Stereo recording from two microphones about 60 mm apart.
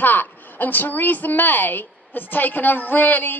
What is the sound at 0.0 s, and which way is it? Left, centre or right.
A woman's voice, left.